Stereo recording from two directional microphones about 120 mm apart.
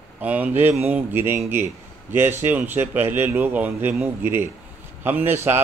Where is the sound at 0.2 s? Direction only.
15° right (ahead or behind).